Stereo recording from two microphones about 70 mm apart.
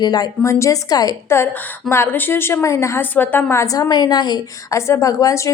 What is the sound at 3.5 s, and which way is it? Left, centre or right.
Speech, left.